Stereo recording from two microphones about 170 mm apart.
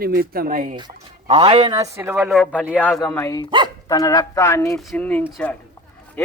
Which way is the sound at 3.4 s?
25° right (ahead or behind).